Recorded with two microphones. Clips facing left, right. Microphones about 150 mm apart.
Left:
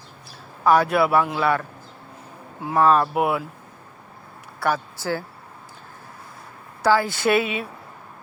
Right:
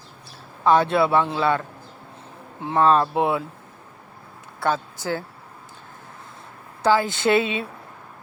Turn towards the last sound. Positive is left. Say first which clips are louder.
# right 1 dB
turn(degrees=-25)  # may be behind; listen again after turning